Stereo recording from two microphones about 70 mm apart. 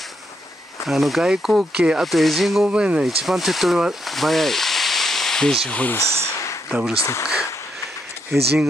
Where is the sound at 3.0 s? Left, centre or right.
Centre.